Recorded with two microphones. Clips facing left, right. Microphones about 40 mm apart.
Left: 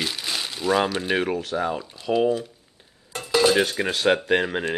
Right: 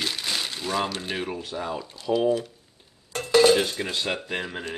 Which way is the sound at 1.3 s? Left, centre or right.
Left.